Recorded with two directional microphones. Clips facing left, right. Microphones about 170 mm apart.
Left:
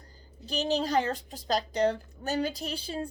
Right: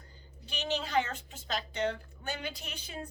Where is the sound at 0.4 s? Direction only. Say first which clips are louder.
Left 7 dB; 35° left (ahead or behind).